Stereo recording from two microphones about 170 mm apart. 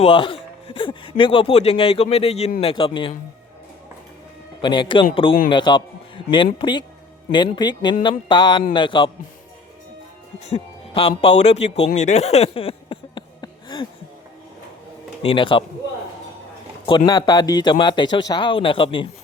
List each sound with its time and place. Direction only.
0.0 s speech: 30° left (ahead or behind)
4.6 s speech: 30° left (ahead or behind)
10.5 s music: 35° left (ahead or behind)
11.2 s speech: 40° left (ahead or behind)
11.9 s a sound: 40° left (ahead or behind); by 13.8 s 25° left (ahead or behind)
15.2 s speech: 30° left (ahead or behind)
17.1 s speech: 25° left (ahead or behind)